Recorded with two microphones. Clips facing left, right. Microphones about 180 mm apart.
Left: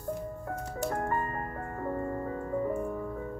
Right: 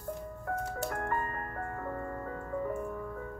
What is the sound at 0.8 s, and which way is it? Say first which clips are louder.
Music: left 6 dB; 30° left (ahead or behind).